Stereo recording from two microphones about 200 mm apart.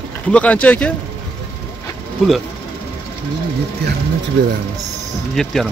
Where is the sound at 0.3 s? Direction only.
5° left (ahead or behind).